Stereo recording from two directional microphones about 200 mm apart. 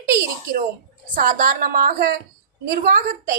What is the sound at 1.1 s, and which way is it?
Speech, 40° right (ahead or behind).